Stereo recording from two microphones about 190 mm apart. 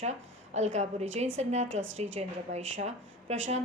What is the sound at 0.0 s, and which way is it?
A woman's voice, 35° right (ahead or behind).